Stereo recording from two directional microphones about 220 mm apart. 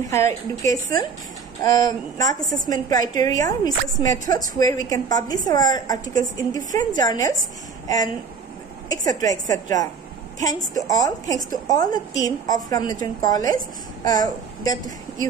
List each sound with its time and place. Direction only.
0.1 s a woman's voice: 15° left (ahead or behind)
2.5 s a woman's voice: 35° right (ahead or behind)
2.9 s a woman's voice: 15° left (ahead or behind)
8.8 s a woman's voice: 15° left (ahead or behind)
14.0 s a sound: 15° left (ahead or behind)